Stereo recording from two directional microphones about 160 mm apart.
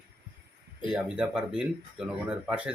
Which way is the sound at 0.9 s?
5° right (ahead or behind).